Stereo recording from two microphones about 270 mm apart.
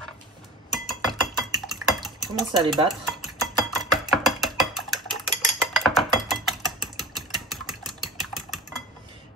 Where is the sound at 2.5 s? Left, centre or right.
Centre.